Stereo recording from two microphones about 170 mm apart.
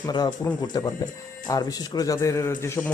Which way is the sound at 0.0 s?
25° left (ahead or behind).